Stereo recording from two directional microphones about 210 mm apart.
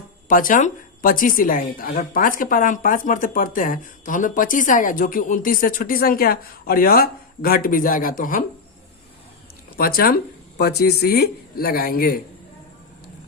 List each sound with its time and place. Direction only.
0.3 s a woman's voice: 40° left (ahead or behind)
9.7 s speech: 45° left (ahead or behind)